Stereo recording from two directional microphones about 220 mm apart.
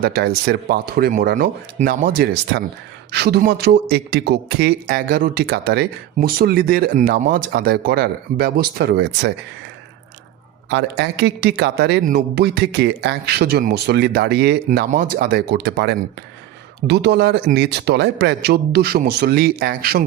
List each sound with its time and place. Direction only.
0.0 s a man's voice: 45° right (ahead or behind)
10.7 s a man's voice: 55° right (ahead or behind)